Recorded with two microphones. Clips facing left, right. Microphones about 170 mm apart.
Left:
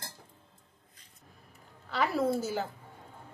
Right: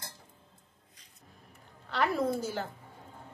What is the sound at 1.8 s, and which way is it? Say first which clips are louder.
Speech: even; centre (ahead or behind).